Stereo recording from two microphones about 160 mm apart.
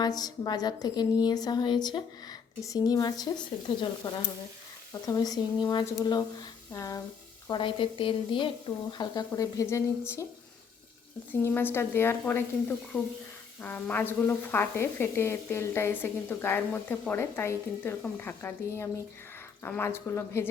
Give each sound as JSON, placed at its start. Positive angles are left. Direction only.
{"t": 0.0, "sound": "a woman's voice", "side_deg": 25}
{"t": 11.3, "sound": "a woman's voice", "side_deg": 10}